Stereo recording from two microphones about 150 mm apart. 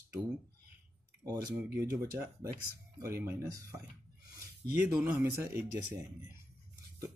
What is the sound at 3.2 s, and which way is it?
Speech, 20° right (ahead or behind).